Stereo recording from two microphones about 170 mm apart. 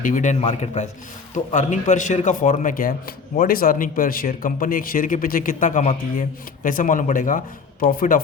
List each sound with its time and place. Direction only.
0.0 s a man's voice: 50° left (ahead or behind)